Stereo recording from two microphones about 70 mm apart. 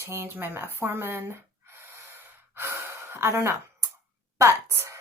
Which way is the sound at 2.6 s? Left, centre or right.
Right.